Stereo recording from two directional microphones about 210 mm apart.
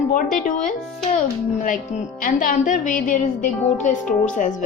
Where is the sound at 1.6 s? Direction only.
35° left (ahead or behind).